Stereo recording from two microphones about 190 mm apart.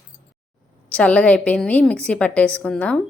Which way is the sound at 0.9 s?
5° left (ahead or behind).